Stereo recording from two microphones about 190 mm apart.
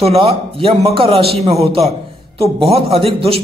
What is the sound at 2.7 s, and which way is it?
Speech, 30° right (ahead or behind).